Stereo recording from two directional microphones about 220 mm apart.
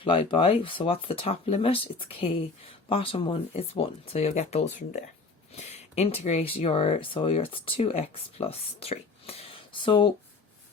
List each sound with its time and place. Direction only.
0.0 s speech: 25° left (ahead or behind)